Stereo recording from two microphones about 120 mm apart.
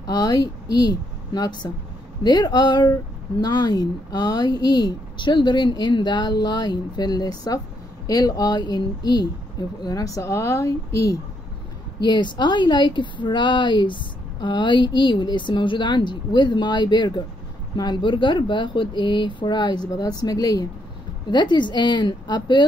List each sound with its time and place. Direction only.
0.0 s speech: 35° left (ahead or behind)
12.0 s speech: 40° left (ahead or behind)